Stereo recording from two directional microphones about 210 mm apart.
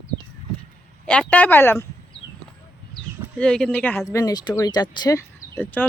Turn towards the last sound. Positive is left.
turn(degrees=15)  # may be behind; listen again after turning